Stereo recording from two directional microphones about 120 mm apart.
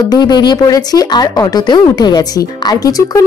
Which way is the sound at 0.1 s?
35° left (ahead or behind).